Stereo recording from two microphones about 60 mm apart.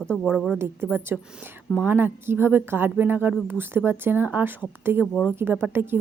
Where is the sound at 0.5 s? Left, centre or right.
Right.